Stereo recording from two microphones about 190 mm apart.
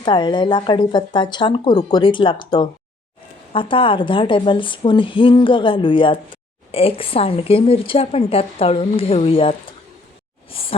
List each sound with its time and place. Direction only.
0.0 s a woman's voice: 25° left (ahead or behind)